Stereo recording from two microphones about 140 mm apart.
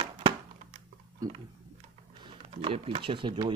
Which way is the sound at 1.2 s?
30° right (ahead or behind).